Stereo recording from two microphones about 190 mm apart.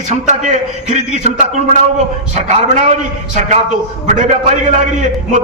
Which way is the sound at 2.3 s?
40° right (ahead or behind).